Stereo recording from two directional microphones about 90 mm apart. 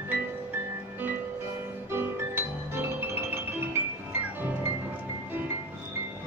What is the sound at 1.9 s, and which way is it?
Music, 25° right (ahead or behind).